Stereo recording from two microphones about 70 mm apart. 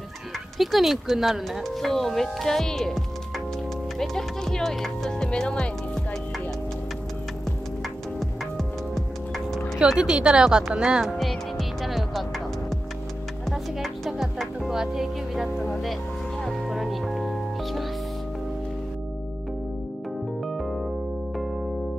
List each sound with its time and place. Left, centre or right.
0.6 s speech: centre
4.0 s speech: centre
8.2 s music: centre
9.9 s speech: centre
11.1 s music: centre
14.1 s speech: centre
16.4 s music: centre
20.4 s electric piano: centre